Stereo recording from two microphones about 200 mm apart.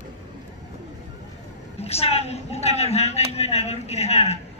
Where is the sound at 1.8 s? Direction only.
30° left (ahead or behind).